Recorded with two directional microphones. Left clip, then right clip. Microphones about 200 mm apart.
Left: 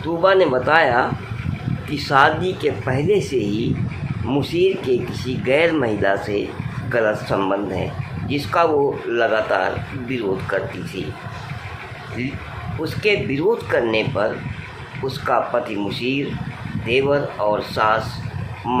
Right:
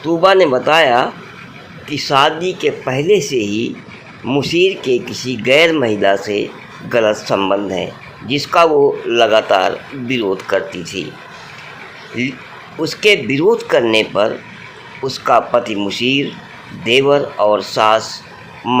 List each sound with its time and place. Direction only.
0.2 s speech: 20° right (ahead or behind)
12.2 s speech: 20° right (ahead or behind)